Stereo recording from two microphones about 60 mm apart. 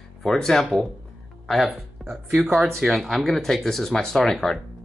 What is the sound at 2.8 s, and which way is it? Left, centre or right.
Speech, centre.